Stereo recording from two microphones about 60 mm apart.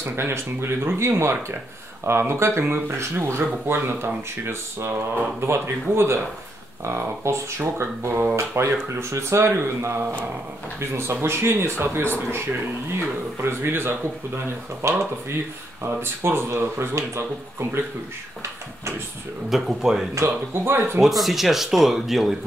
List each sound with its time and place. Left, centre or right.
0.0 s speech: right
13.4 s speech: right
19.5 s speech: centre
20.2 s speech: right
21.0 s speech: centre